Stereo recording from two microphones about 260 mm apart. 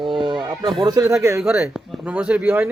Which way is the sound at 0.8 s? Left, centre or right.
Centre.